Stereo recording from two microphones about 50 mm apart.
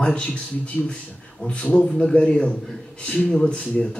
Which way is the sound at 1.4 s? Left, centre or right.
Left.